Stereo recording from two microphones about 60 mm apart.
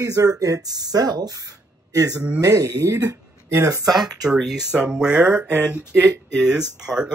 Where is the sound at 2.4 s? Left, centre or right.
Right.